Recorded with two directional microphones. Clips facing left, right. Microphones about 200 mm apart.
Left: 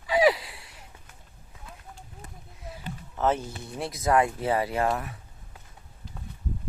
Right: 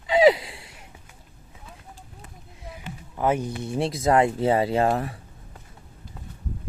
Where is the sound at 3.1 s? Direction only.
10° right (ahead or behind); by 5.2 s 30° right (ahead or behind).